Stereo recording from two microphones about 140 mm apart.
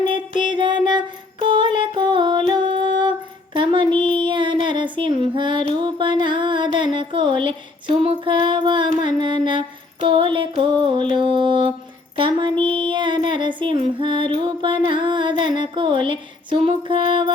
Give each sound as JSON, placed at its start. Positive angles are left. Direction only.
{"t": 0.0, "sound": "music", "side_deg": -35}
{"t": 3.5, "sound": "a sound", "side_deg": -35}
{"t": 9.0, "sound": "music", "side_deg": -35}
{"t": 10.6, "sound": "mantra", "side_deg": -35}
{"t": 12.1, "sound": "a sound", "side_deg": -35}
{"t": 13.6, "sound": "music", "side_deg": -35}